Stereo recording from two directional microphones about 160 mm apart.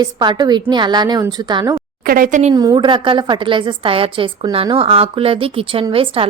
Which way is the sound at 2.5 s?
25° right (ahead or behind).